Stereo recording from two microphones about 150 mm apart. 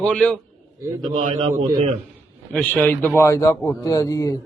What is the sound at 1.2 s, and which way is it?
Speech, 60° right (ahead or behind).